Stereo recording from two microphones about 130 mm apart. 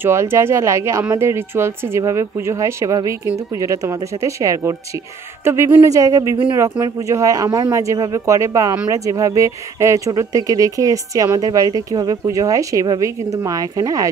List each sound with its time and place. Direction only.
0.0 s speech: 20° right (ahead or behind)